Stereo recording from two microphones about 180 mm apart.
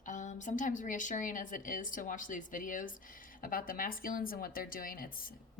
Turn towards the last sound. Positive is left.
turn(degrees=50)  # may be behind; listen again after turning